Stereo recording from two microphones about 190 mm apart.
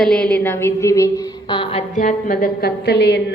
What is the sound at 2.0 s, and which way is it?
A woman's voice, 45° left (ahead or behind).